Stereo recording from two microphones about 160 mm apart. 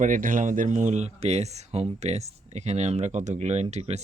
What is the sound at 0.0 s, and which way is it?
Speech, 55° right (ahead or behind).